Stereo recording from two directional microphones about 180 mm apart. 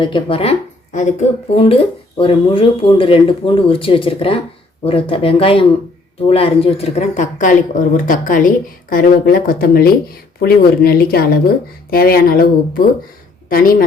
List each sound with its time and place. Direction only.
0.0 s speech: 30° left (ahead or behind); by 13.8 s 55° left (ahead or behind)